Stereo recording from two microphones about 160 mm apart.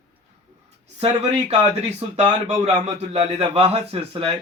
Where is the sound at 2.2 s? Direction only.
40° right (ahead or behind).